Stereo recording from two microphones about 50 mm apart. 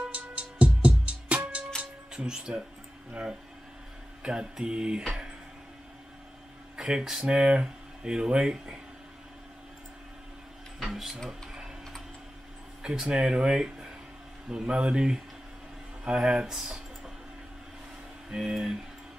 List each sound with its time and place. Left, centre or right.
0.1 s music: right
2.1 s speech: centre
4.2 s speech: centre
6.8 s speech: centre
7.2 s speech: centre
10.8 s printer: centre
11.2 s a sound: centre
12.8 s speech: centre
16.2 s speech: centre
16.5 s typing: centre
18.3 s speech: centre